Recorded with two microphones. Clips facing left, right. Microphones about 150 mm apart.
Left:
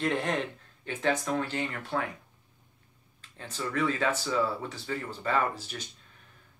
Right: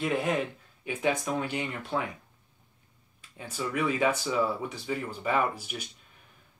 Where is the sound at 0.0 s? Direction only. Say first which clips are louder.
Right 1 dB; 5° right (ahead or behind).